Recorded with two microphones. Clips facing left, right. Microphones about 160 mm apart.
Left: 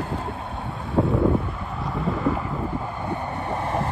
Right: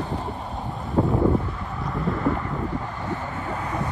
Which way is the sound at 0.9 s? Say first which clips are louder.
Even; centre (ahead or behind).